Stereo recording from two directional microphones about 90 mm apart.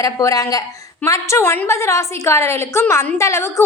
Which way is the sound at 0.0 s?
40° left (ahead or behind).